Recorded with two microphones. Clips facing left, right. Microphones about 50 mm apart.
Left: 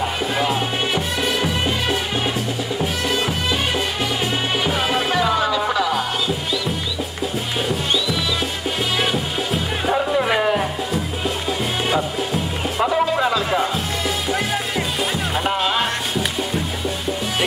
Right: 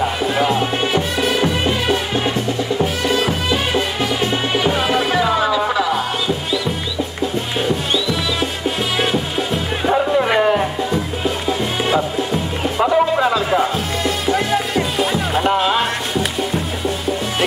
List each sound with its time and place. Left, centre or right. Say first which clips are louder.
0.0 s music: right 4 dB; centre
8.6 s music: right 2 dB; centre